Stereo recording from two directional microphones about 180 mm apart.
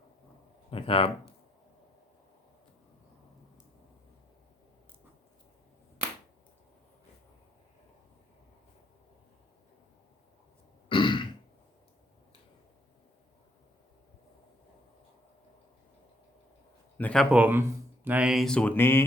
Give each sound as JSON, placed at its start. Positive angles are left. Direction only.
{"t": 0.7, "sound": "speech", "side_deg": 30}
{"t": 10.8, "sound": "grunt", "side_deg": 25}
{"t": 17.0, "sound": "speech", "side_deg": 5}
{"t": 17.3, "sound": "speech", "side_deg": -10}